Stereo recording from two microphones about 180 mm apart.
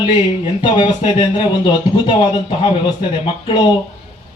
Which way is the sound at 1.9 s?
30° left (ahead or behind).